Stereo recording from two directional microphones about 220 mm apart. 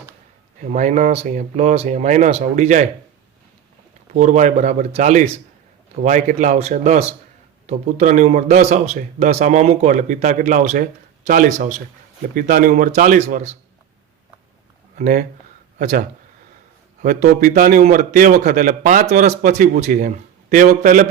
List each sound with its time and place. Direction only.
0.6 s speech: 35° right (ahead or behind)
4.1 s speech: 35° right (ahead or behind)
14.9 s speech: 35° right (ahead or behind)